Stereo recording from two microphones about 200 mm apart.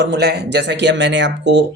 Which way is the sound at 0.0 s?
55° right (ahead or behind).